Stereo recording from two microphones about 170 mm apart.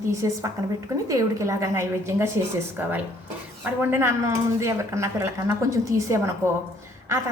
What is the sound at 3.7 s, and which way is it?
Speech, 15° right (ahead or behind).